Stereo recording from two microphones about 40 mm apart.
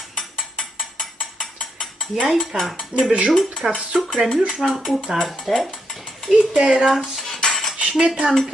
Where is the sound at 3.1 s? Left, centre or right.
Right.